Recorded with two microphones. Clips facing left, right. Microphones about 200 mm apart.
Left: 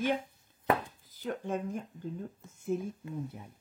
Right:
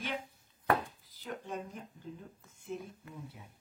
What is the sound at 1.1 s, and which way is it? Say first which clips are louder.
Speech: left 9 dB; 50° left (ahead or behind).